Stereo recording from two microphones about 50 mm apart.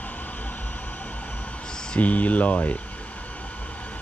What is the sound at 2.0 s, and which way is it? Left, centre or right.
Speech, left.